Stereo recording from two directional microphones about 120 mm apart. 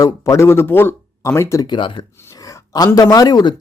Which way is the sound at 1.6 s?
40° left (ahead or behind).